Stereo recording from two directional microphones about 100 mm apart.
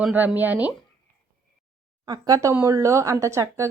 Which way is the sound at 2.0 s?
40° right (ahead or behind).